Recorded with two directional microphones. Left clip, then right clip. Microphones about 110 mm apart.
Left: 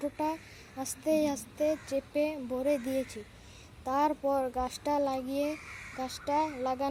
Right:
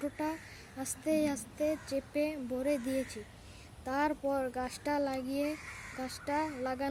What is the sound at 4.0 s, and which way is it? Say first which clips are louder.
Speech: left 4 dB; 15° left (ahead or behind).